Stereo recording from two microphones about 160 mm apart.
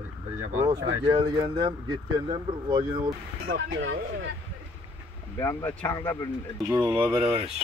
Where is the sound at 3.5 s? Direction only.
80° right.